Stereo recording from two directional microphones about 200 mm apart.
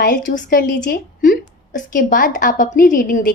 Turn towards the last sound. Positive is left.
turn(degrees=45)  # may be behind; listen again after turning